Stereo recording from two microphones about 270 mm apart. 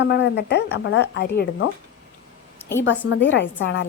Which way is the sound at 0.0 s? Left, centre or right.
Left.